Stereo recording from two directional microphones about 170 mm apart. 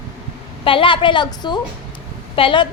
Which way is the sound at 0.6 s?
30° left (ahead or behind).